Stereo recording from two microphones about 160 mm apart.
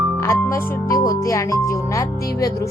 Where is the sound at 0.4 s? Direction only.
15° left (ahead or behind).